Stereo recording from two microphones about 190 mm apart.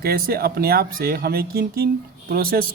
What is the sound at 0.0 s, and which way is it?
Speech, 55° right (ahead or behind).